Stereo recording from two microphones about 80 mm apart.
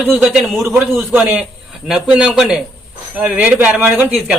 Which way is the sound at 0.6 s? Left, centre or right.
Right.